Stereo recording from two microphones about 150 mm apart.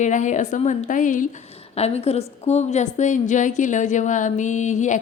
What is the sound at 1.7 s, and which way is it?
A woman's voice, 45° left (ahead or behind).